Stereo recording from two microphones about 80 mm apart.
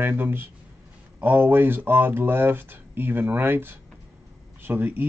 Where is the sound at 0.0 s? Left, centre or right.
Right.